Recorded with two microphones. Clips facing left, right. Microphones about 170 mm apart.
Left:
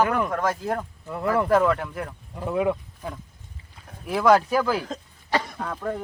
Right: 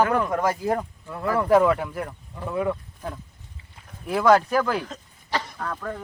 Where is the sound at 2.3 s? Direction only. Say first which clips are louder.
Left 2 dB; 15° left (ahead or behind).